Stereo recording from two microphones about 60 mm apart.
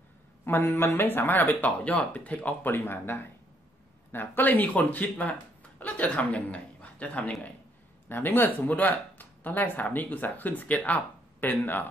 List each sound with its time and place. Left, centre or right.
0.5 s speech: left
8.1 s speech: left